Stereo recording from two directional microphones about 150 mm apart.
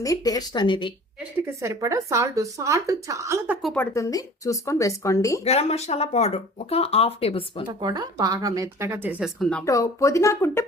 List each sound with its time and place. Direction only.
0.0 s a woman's voice: 25° left (ahead or behind)
1.6 s speech: 20° right (ahead or behind)
3.8 s a woman's voice: 20° left (ahead or behind)
5.4 s speech: 45° left (ahead or behind)
7.8 s speech: 25° right (ahead or behind); by 9.3 s 10° right (ahead or behind)
9.4 s speech: 5° left (ahead or behind)
9.6 s a woman's voice: 20° left (ahead or behind)